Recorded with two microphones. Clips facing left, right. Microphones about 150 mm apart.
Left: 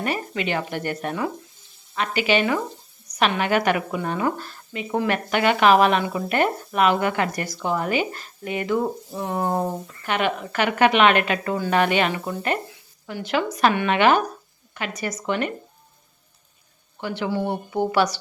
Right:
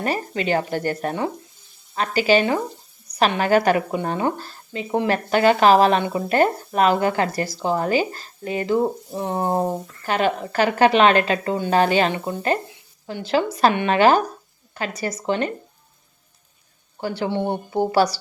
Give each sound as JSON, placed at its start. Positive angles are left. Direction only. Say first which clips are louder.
{"t": 0.0, "sound": "speech", "louder": "right 2 dB", "side_deg": -35}
{"t": 17.0, "sound": "speech", "louder": "right 2 dB", "side_deg": -35}